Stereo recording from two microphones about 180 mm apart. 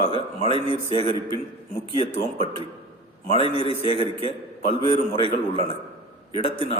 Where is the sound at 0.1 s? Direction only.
30° left (ahead or behind).